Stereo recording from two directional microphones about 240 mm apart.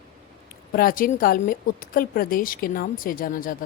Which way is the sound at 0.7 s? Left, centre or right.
Left.